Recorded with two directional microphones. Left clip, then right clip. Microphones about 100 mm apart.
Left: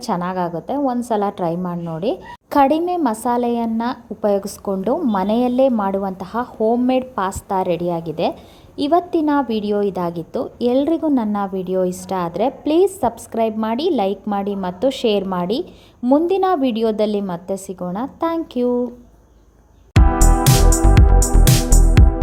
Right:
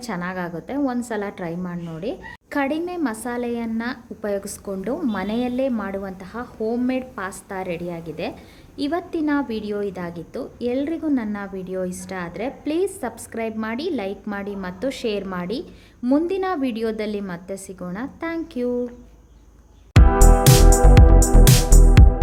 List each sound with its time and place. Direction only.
0.0 s a woman's voice: 40° left (ahead or behind)
1.2 s a woman's voice: 45° left (ahead or behind)
5.1 s a woman's voice: 45° left (ahead or behind)
19.9 s music: centre (ahead or behind)